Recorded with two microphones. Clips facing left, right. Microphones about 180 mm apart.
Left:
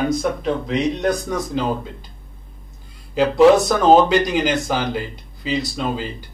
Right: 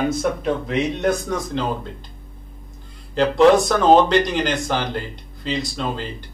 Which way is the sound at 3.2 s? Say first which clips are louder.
Left 2 dB; 5° left (ahead or behind).